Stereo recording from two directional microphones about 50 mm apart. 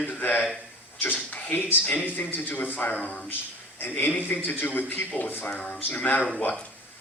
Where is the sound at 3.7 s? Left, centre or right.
Left.